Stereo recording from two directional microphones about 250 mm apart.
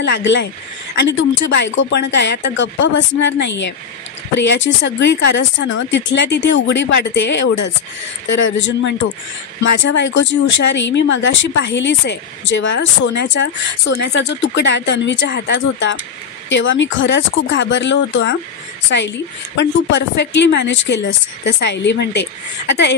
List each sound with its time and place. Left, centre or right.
0.0 s speech: left
9.6 s speech: left